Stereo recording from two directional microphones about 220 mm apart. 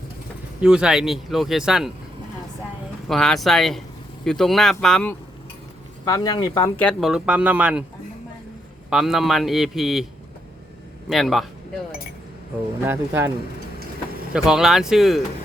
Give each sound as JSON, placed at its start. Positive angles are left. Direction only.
{"t": 0.6, "sound": "speech", "side_deg": -5}
{"t": 3.1, "sound": "speech", "side_deg": 0}
{"t": 6.1, "sound": "speech", "side_deg": 15}
{"t": 6.8, "sound": "speech", "side_deg": 0}
{"t": 8.9, "sound": "speech", "side_deg": 0}
{"t": 11.1, "sound": "speech", "side_deg": 0}
{"t": 12.8, "sound": "speech", "side_deg": -10}
{"t": 14.3, "sound": "speech", "side_deg": -5}